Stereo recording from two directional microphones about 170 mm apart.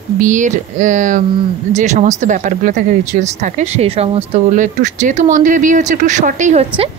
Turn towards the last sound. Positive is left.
turn(degrees=-40)  # may be behind; listen again after turning